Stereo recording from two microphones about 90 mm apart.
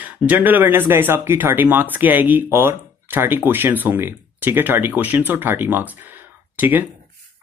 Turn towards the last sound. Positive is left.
turn(degrees=-20)  # may be behind; listen again after turning